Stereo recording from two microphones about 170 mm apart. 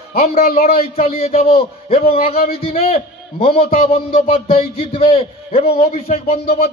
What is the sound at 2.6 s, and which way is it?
A man's voice, 35° left (ahead or behind).